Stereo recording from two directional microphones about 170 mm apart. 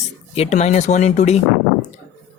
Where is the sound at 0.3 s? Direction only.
40° left (ahead or behind).